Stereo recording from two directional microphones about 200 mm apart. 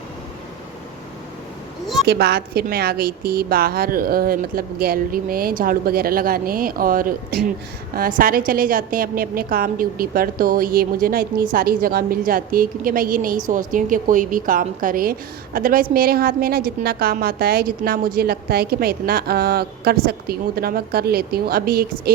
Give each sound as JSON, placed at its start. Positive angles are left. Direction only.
{"t": 2.0, "sound": "a woman's voice", "side_deg": -55}